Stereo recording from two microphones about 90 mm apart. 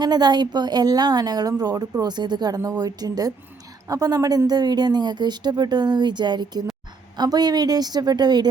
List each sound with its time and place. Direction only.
0.0 s a woman's voice: 50° right (ahead or behind)